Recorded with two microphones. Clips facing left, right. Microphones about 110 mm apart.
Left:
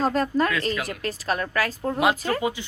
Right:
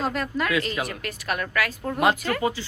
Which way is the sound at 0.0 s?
35° left (ahead or behind).